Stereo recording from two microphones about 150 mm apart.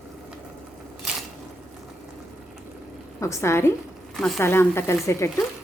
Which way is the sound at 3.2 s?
20° left (ahead or behind).